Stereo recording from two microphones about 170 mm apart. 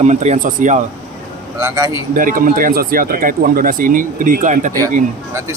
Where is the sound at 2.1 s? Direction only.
55° right (ahead or behind).